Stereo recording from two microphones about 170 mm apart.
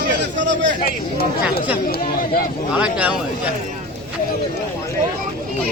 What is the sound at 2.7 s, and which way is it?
Speech, 5° right (ahead or behind).